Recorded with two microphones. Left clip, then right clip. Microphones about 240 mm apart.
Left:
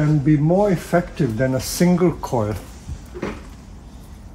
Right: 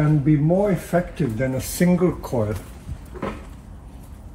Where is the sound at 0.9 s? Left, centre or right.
Left.